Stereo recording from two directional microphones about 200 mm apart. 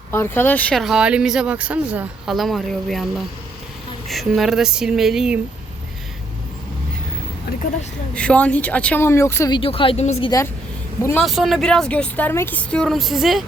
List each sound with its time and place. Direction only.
0.1 s speech: 10° left (ahead or behind)
4.1 s speech: centre (ahead or behind)
8.1 s speech: 5° left (ahead or behind)
9.6 s speech: 25° left (ahead or behind)
11.0 s speech: 10° left (ahead or behind)
11.3 s speech: centre (ahead or behind)